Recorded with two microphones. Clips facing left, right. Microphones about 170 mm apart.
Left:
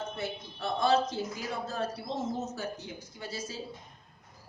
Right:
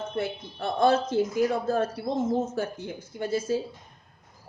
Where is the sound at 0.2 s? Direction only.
50° right (ahead or behind).